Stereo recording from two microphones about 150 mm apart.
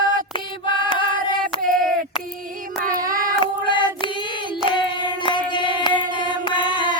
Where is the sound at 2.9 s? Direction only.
65° right (ahead or behind).